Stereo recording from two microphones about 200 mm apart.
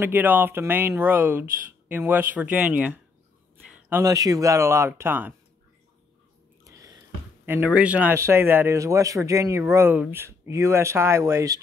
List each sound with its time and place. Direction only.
0.0 s speech: 10° right (ahead or behind)
6.6 s a sound: 15° right (ahead or behind)
7.4 s speech: 10° right (ahead or behind)